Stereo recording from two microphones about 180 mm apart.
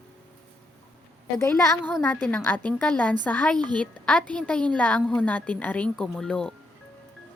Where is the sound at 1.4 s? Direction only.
15° left (ahead or behind).